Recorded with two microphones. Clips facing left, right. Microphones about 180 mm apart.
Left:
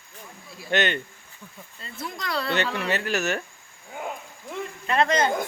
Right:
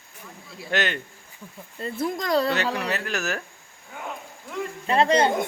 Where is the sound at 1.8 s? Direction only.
50° right (ahead or behind).